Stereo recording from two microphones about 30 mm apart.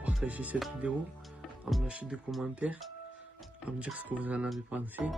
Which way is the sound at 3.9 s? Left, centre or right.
Right.